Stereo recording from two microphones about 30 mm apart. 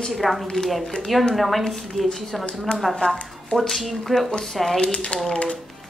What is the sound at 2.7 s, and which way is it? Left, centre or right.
Speech, left.